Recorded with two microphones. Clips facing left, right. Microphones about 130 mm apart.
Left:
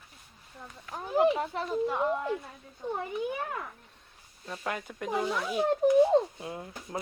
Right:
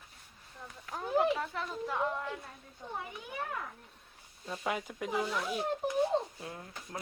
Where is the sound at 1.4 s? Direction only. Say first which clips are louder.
Left 7 dB; 25° left (ahead or behind).